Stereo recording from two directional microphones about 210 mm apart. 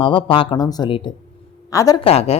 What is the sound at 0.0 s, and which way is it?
Speech, 25° left (ahead or behind).